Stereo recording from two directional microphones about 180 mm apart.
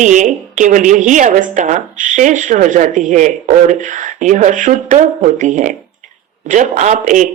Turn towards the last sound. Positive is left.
turn(degrees=-45)  # may be behind; listen again after turning